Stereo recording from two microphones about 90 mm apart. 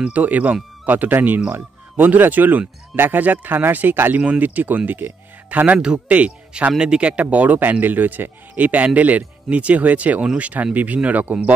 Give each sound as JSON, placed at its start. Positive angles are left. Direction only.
{"t": 0.0, "sound": "speech", "side_deg": -15}